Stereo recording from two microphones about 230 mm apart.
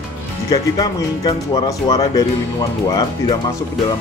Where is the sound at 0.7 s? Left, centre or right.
Centre.